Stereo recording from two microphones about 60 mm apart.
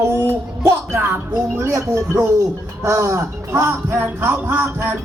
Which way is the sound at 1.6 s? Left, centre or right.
Right.